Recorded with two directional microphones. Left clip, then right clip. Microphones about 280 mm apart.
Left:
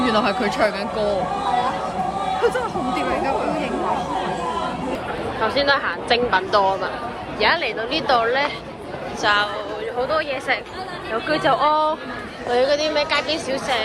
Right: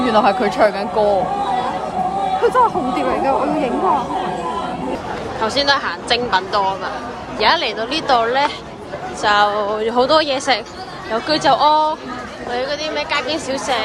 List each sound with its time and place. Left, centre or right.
0.0 s speech: centre
5.4 s a woman's voice: centre
12.5 s a woman's voice: centre